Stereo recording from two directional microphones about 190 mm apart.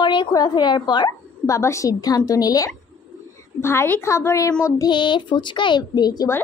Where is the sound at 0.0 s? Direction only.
25° left (ahead or behind).